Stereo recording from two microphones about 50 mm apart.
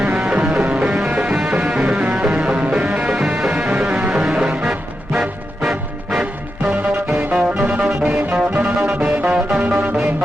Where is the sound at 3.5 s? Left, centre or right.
Right.